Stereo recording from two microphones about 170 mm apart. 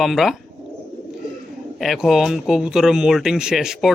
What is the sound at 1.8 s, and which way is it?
Speech, centre (ahead or behind).